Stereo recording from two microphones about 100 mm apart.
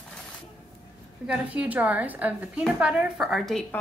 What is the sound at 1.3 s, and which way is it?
A woman's voice, 15° right (ahead or behind).